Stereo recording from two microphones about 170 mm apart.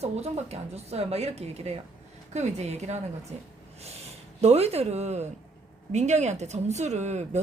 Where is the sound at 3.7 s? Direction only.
40° right (ahead or behind).